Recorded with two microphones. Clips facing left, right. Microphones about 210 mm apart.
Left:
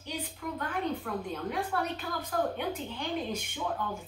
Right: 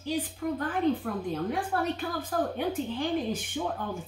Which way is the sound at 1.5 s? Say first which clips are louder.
Even; 50° right (ahead or behind).